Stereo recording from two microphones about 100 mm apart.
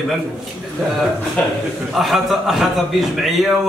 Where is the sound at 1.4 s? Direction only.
15° left (ahead or behind).